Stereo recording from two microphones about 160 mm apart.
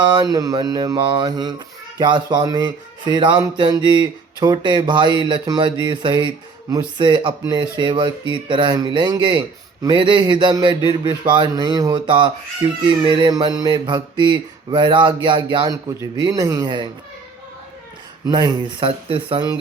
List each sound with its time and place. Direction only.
0.0 s speech: 30° right (ahead or behind)
18.3 s speech: 25° right (ahead or behind)